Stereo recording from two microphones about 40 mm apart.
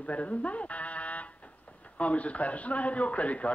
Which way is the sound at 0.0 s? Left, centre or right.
Left.